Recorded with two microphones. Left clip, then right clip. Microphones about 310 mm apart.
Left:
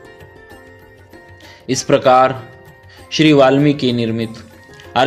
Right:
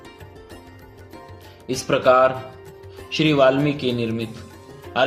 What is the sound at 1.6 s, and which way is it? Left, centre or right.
Mantra, left.